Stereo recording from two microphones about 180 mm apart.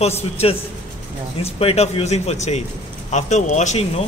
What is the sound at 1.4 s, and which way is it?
Speech, 35° left (ahead or behind).